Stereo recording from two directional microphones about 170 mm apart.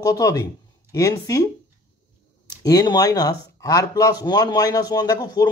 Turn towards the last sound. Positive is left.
turn(degrees=25)  # may be behind; listen again after turning